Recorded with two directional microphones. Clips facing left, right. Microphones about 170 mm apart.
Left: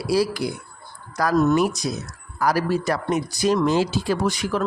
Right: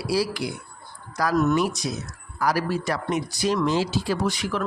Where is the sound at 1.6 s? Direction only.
50° left (ahead or behind).